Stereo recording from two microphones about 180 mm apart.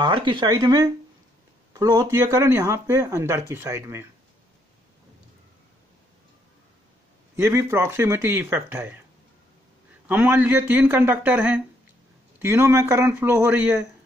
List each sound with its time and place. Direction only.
0.0 s speech: 25° right (ahead or behind)
7.3 s speech: 15° right (ahead or behind)
10.0 s speech: 10° right (ahead or behind)